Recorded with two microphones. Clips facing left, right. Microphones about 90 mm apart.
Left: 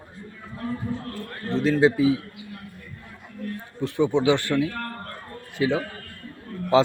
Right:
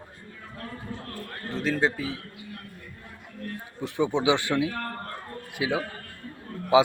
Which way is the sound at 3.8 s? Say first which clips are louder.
Left 3 dB; 15° right (ahead or behind).